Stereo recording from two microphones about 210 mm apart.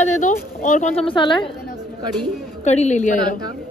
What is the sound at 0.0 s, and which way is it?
Speech, 35° left (ahead or behind).